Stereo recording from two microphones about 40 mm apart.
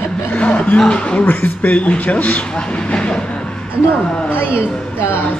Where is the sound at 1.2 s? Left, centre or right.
Left.